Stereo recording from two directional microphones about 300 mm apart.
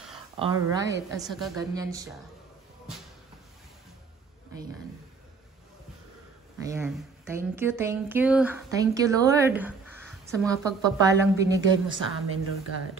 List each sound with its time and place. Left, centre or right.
0.4 s speech: centre
1.2 s a woman's voice: centre
1.7 s speech: centre
6.6 s speech: centre
11.7 s a woman's voice: right